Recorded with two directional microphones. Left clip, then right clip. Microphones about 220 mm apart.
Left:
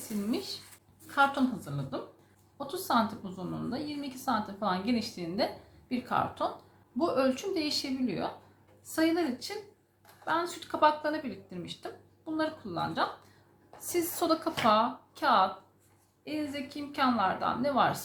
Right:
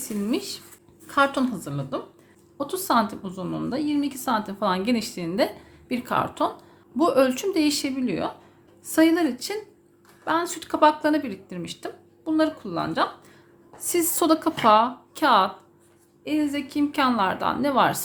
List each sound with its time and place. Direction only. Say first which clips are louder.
0.3 s a woman's voice: right 7 dB; 40° right (ahead or behind)